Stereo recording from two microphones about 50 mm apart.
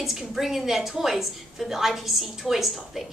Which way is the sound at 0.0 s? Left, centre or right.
Centre.